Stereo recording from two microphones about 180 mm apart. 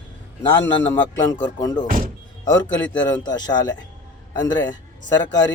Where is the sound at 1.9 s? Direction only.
50° right (ahead or behind).